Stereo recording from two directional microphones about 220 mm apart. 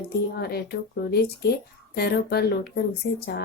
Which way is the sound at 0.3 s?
45° left (ahead or behind).